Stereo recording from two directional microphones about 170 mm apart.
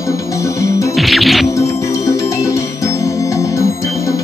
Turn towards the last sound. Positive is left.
turn(degrees=20)  # may be behind; listen again after turning